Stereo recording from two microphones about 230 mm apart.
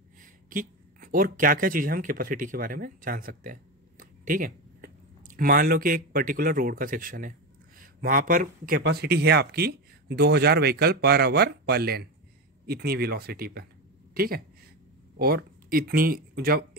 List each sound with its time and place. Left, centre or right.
0.2 s a woman's voice: right